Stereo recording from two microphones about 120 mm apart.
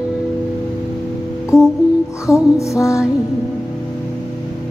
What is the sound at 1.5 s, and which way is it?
Music, 25° left (ahead or behind).